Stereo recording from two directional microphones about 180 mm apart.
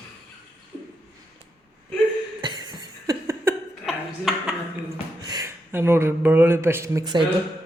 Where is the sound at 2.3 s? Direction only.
25° right (ahead or behind).